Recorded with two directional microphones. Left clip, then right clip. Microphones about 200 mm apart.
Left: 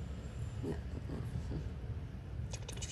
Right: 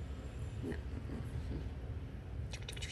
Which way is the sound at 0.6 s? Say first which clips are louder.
Left 2 dB; centre (ahead or behind).